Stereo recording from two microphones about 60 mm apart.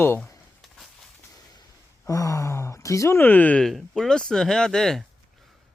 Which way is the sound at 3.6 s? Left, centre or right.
Centre.